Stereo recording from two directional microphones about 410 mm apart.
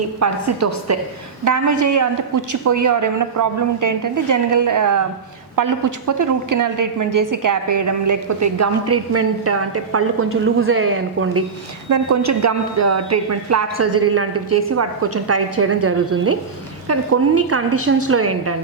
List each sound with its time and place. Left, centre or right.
0.2 s a woman's voice: right
11.9 s a woman's voice: right